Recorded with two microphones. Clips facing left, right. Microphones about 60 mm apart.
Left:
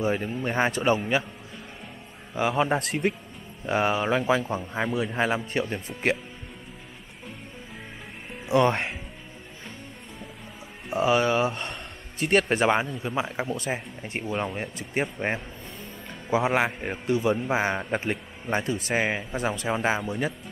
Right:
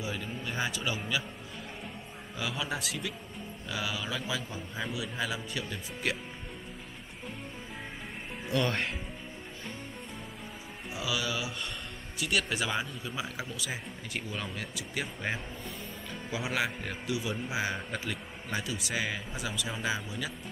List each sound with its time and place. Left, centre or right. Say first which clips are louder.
0.0 s a man's voice: left 10 dB; left
2.3 s a man's voice: left 11 dB; left
8.5 s speech: left 9 dB; left
10.9 s a man's voice: left 12 dB; left